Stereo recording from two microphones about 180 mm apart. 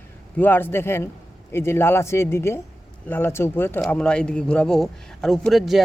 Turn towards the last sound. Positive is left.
turn(degrees=0)  # may be behind; listen again after turning